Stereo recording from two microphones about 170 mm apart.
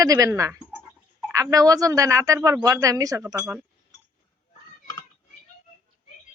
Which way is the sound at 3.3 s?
10° right (ahead or behind).